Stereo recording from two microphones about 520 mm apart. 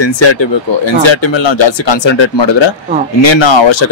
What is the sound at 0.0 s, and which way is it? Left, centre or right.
A man's voice, left.